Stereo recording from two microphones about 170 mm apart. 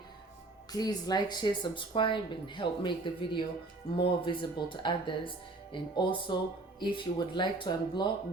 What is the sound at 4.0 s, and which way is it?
Speech, 30° left (ahead or behind).